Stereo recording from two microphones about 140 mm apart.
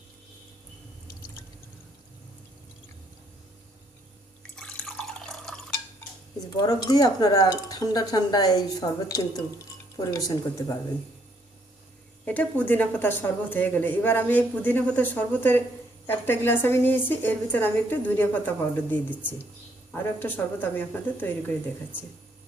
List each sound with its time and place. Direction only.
4.5 s drip: 5° left (ahead or behind)
6.6 s speech: 25° left (ahead or behind)
12.2 s speech: 10° left (ahead or behind)